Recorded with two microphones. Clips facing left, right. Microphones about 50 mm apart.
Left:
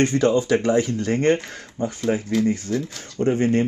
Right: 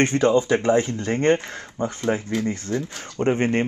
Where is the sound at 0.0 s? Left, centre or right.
Right.